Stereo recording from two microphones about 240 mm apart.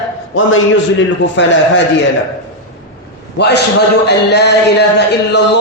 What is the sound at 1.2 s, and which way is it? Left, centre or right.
Speech, left.